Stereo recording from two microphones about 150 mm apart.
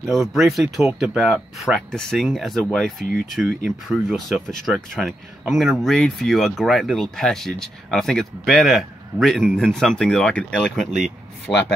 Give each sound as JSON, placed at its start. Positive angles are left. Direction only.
{"t": 0.0, "sound": "speech", "side_deg": 0}
{"t": 11.5, "sound": "speech", "side_deg": 30}